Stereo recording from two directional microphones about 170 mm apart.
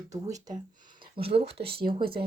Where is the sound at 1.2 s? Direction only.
35° right (ahead or behind).